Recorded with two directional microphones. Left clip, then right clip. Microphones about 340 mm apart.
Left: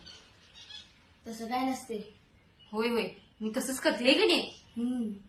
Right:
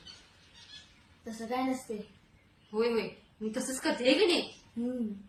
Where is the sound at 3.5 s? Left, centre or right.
Centre.